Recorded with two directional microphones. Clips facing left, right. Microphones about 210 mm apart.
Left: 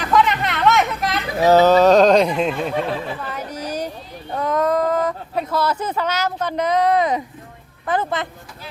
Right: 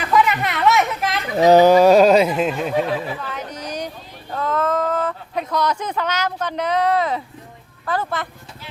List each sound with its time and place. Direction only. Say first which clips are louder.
0.1 s speech: even; 5° right (ahead or behind)
1.4 s speech: right 2 dB; 15° right (ahead or behind)
3.3 s a sound: left 2 dB; 10° left (ahead or behind)
4.3 s speech: left 2 dB; 20° left (ahead or behind)